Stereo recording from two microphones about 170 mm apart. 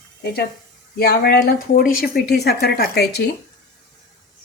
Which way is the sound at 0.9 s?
65° left (ahead or behind).